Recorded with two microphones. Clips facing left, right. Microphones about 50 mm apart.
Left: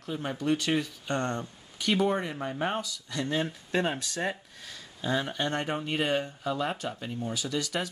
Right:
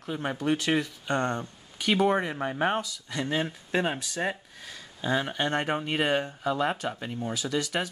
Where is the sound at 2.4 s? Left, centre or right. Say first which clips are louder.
Right 4 dB; right.